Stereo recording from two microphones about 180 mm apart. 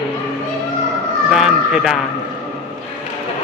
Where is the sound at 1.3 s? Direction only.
Centre (ahead or behind).